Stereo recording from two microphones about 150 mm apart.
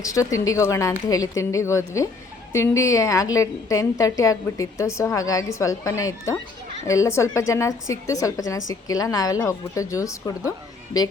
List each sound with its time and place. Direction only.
0.0 s a woman's voice: 20° left (ahead or behind)